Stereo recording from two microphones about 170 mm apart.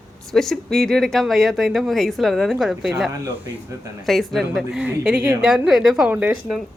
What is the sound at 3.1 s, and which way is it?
Speech, 15° right (ahead or behind).